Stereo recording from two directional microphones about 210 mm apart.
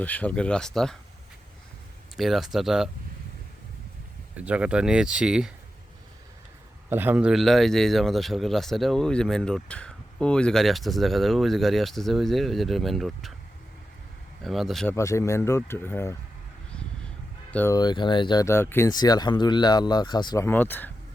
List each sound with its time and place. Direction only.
0.0 s a man's voice: 5° left (ahead or behind)
2.1 s a man's voice: centre (ahead or behind)
4.4 s a man's voice: 5° right (ahead or behind)
6.9 s a man's voice: 10° right (ahead or behind)
14.4 s a man's voice: centre (ahead or behind)
14.9 s speech: 15° left (ahead or behind)
17.5 s speech: 10° left (ahead or behind)
17.7 s speech: 20° left (ahead or behind)